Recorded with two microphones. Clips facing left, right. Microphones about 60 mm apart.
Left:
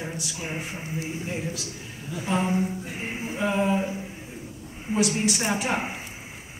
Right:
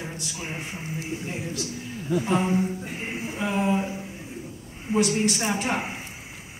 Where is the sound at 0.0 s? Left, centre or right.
Centre.